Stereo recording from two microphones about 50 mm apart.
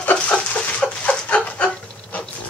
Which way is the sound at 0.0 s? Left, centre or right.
Left.